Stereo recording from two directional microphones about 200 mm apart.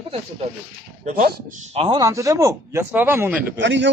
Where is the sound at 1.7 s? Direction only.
30° right (ahead or behind).